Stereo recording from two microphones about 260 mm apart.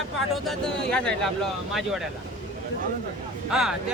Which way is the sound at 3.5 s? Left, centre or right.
Centre.